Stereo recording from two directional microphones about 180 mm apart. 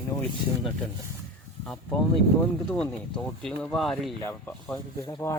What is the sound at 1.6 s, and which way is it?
Speech, 5° left (ahead or behind).